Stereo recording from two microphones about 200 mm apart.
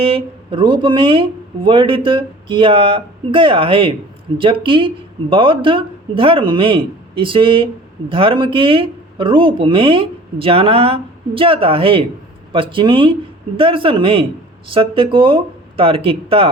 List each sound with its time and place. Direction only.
0.0 s speech: 25° right (ahead or behind)